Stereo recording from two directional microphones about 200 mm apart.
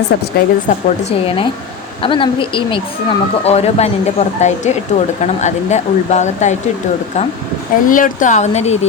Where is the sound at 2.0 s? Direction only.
25° left (ahead or behind).